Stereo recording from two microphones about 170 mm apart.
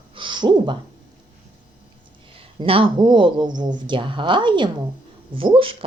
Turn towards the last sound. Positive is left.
turn(degrees=-30)  # may be behind; listen again after turning